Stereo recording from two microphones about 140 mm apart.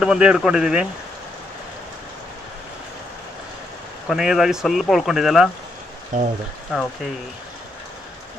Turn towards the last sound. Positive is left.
turn(degrees=-5)  # may be behind; listen again after turning